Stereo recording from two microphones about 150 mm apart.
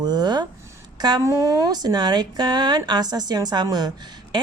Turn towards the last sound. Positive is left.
turn(degrees=-25)  # may be behind; listen again after turning